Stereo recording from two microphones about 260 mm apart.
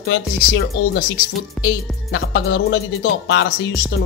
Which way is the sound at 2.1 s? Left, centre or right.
Left.